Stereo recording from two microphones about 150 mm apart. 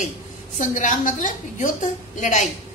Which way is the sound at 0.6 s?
60° left (ahead or behind).